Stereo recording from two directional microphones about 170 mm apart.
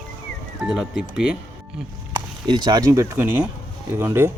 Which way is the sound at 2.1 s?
25° right (ahead or behind).